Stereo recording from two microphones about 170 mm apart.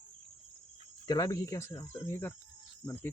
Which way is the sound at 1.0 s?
20° left (ahead or behind).